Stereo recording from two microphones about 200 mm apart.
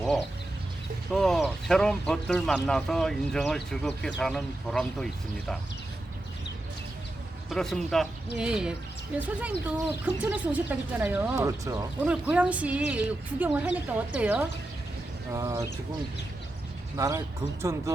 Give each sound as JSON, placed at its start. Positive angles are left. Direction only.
{"t": 1.1, "sound": "speech", "side_deg": 0}
{"t": 7.5, "sound": "speech", "side_deg": 0}
{"t": 11.9, "sound": "speech", "side_deg": -5}
{"t": 17.0, "sound": "speech", "side_deg": -15}